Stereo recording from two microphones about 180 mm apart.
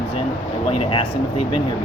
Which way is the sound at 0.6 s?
35° left (ahead or behind).